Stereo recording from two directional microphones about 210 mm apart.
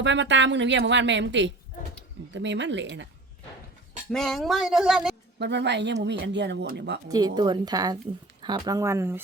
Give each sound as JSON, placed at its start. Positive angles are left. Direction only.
{"t": 0.0, "sound": "speech", "side_deg": -60}
{"t": 4.1, "sound": "speech", "side_deg": 0}
{"t": 5.4, "sound": "speech", "side_deg": -55}
{"t": 7.1, "sound": "a woman's voice", "side_deg": -20}